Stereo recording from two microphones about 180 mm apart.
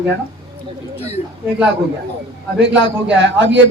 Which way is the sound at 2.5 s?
80° right.